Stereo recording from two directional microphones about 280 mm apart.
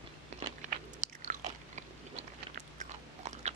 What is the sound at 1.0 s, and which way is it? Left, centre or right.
Biting, right.